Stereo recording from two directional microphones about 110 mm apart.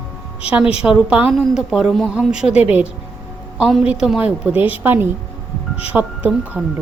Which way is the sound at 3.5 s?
Centre (ahead or behind).